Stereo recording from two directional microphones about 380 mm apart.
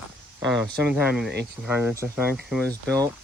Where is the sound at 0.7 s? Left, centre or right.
Centre.